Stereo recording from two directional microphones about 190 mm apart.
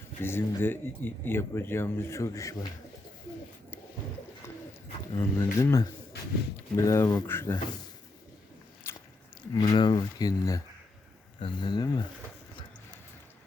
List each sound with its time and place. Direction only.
0.2 s speech: 10° left (ahead or behind)
4.4 s bird: 15° left (ahead or behind)
5.1 s speech: 15° left (ahead or behind)
8.9 s biting: 10° left (ahead or behind)
9.6 s speech: 20° left (ahead or behind)